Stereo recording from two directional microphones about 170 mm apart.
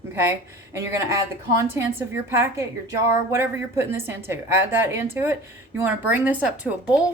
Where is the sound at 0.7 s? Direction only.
20° right (ahead or behind).